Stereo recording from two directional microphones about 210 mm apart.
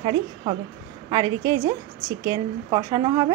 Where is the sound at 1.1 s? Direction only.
15° right (ahead or behind).